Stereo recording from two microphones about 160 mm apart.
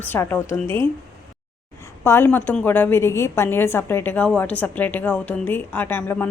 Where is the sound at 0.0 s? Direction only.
15° left (ahead or behind).